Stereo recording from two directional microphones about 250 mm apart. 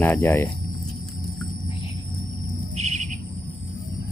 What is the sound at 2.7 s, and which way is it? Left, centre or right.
Music, right.